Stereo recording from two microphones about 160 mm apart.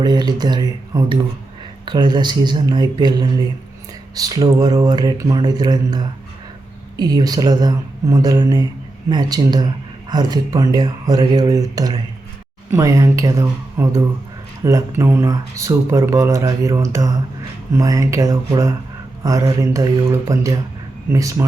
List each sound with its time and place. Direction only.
0.0 s speech: 25° right (ahead or behind)